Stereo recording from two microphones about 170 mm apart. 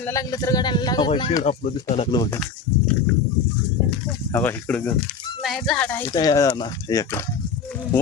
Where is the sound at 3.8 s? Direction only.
10° left (ahead or behind).